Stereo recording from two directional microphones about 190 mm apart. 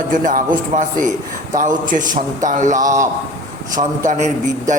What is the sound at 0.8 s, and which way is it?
A man's voice, 40° right (ahead or behind).